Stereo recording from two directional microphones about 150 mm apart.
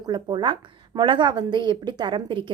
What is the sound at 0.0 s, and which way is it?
A woman's voice, 30° right (ahead or behind).